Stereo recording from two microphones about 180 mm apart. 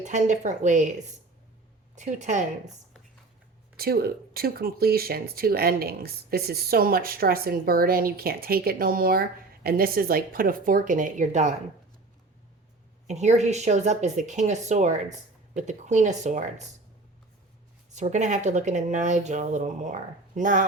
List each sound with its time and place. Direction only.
0.0 s speech: 40° right (ahead or behind)
2.0 s speech: 40° right (ahead or behind)
3.8 s speech: 60° right (ahead or behind); by 11.5 s 40° right (ahead or behind)
13.1 s speech: 40° right (ahead or behind)
17.9 s speech: 40° right (ahead or behind)